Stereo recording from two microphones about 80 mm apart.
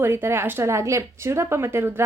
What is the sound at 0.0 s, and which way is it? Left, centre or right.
A woman's voice, right.